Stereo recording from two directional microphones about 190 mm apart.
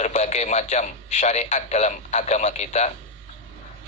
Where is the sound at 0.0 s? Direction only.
35° left (ahead or behind).